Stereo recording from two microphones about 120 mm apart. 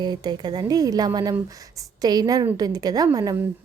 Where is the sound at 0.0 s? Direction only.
35° right (ahead or behind).